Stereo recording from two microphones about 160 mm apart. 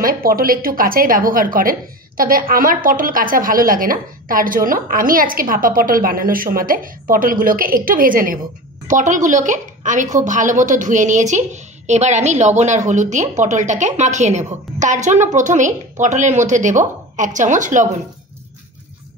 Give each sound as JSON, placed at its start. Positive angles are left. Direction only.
{"t": 0.0, "sound": "a woman's voice", "side_deg": -65}